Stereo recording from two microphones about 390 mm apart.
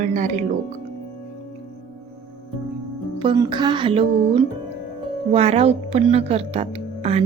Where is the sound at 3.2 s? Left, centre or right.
Centre.